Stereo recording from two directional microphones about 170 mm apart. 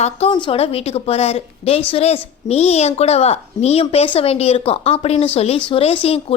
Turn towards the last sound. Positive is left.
turn(degrees=35)  # may be behind; listen again after turning